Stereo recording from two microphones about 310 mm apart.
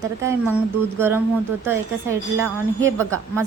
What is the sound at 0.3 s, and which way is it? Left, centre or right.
A woman's voice, centre.